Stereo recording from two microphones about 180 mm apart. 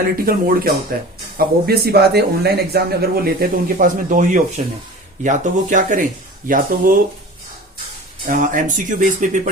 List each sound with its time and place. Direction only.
0.3 s speech: 55° right (ahead or behind)
8.3 s speech: 45° right (ahead or behind)